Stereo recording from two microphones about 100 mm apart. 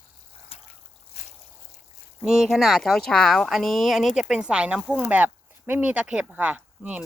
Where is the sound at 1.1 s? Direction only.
90° left.